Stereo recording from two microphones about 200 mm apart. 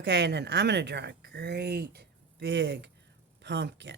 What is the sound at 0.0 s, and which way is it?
A woman's voice, 60° right (ahead or behind).